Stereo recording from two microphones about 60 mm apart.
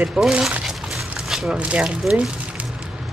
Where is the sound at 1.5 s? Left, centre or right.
Right.